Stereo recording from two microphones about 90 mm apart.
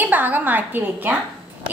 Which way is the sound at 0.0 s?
20° right (ahead or behind).